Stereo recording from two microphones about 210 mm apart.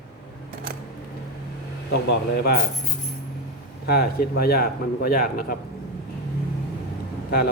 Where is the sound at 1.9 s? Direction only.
55° left (ahead or behind).